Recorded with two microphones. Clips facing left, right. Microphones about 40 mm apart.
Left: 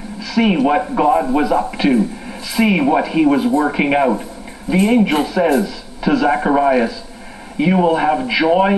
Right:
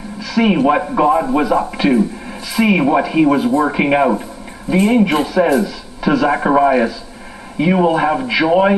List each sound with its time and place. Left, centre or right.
0.2 s a man's voice: centre